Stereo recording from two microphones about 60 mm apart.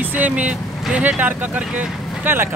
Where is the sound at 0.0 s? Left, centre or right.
Right.